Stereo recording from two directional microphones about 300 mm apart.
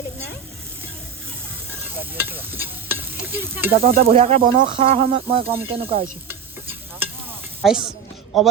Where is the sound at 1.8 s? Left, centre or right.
Centre.